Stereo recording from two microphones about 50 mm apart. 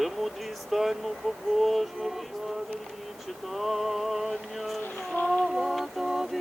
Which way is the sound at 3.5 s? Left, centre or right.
Centre.